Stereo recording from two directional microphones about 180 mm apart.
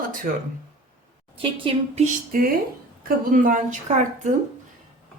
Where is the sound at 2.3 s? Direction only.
50° right (ahead or behind).